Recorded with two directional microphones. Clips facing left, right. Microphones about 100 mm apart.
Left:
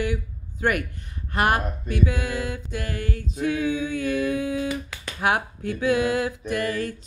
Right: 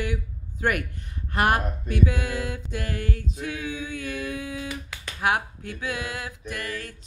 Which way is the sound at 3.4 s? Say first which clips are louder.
Left 10 dB; 35° left (ahead or behind).